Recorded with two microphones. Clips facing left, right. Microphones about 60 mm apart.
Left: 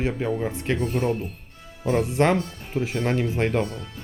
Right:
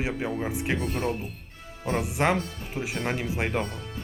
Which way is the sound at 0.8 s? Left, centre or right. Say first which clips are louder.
Left 4 dB; centre.